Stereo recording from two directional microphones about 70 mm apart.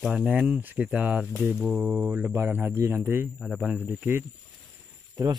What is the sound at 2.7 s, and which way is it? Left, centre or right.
Speech, right.